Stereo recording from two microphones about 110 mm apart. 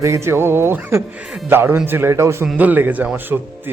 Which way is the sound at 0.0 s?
25° right (ahead or behind).